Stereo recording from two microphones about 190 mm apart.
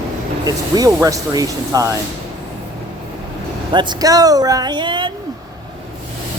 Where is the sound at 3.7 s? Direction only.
20° right (ahead or behind).